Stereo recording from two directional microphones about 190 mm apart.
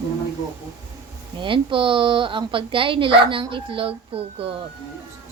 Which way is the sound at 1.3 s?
25° right (ahead or behind).